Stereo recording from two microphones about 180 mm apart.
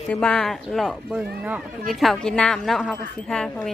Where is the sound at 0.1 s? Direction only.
5° left (ahead or behind).